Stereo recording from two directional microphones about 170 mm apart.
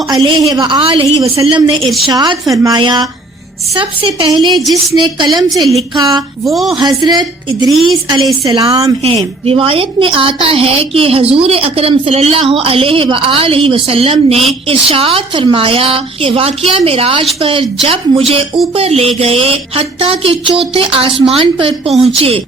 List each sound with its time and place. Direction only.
0.1 s a woman's voice: 25° right (ahead or behind)
6.5 s speech: centre (ahead or behind)
6.7 s a woman's voice: 25° right (ahead or behind)